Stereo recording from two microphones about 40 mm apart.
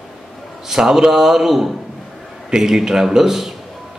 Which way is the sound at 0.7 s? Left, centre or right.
Centre.